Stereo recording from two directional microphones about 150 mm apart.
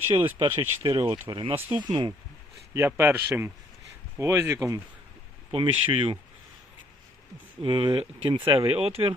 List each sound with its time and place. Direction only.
0.3 s speech: 35° right (ahead or behind)
1.0 s a man's voice: 15° right (ahead or behind)
1.3 s speech: 35° right (ahead or behind)
2.7 s a man's voice: 15° right (ahead or behind)
5.5 s speech: 35° right (ahead or behind)
7.6 s speech: 30° right (ahead or behind)